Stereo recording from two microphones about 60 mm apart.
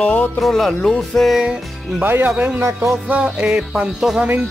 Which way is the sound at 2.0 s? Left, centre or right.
Right.